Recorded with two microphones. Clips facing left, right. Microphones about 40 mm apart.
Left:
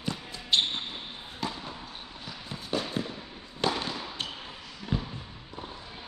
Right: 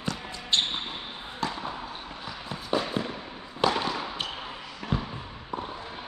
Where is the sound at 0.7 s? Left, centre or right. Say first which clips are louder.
Right 2 dB; centre.